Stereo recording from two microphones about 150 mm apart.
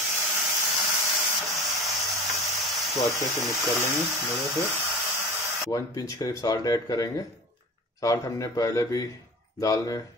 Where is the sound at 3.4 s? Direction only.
Centre (ahead or behind).